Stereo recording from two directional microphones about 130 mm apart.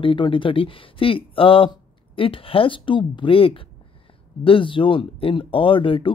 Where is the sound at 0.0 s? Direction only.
40° left (ahead or behind).